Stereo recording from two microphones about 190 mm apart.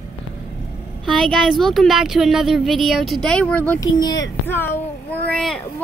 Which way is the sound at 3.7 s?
20° left (ahead or behind).